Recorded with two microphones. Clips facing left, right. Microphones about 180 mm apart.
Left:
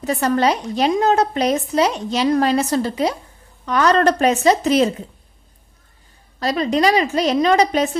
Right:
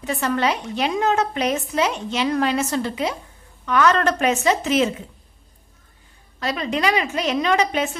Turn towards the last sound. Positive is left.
turn(degrees=35)  # may be behind; listen again after turning